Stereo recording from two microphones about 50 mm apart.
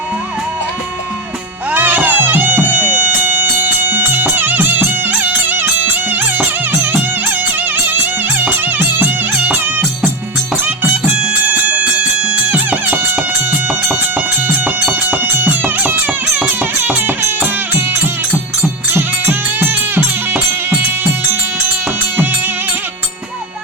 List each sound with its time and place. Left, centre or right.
1.7 s music: right
11.4 s music: right
13.8 s music: right
18.9 s music: right